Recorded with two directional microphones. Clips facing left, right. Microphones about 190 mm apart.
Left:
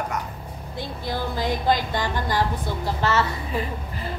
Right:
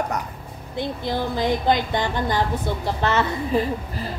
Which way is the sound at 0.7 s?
20° right (ahead or behind).